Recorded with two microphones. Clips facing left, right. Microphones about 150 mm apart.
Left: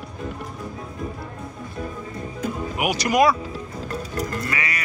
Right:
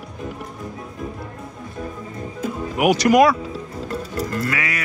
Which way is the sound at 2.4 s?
Centre (ahead or behind).